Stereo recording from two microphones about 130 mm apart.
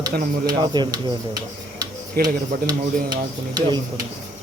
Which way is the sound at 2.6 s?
35° right (ahead or behind).